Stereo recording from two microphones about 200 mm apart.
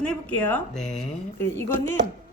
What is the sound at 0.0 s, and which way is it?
Speech, 5° left (ahead or behind).